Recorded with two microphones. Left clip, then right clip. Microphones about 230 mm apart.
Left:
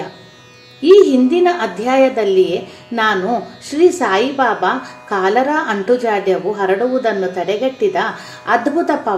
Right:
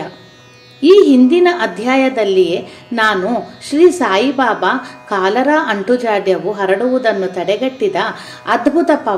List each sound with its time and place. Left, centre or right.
1.3 s speech: right